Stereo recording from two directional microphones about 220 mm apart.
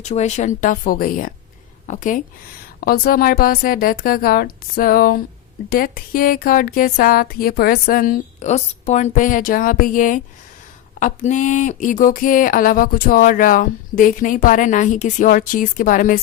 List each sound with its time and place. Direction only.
0.0 s speech: 30° left (ahead or behind)
11.3 s speech: 35° left (ahead or behind)